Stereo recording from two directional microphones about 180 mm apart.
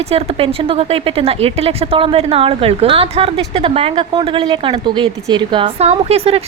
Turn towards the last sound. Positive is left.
turn(degrees=-35)  # may be behind; listen again after turning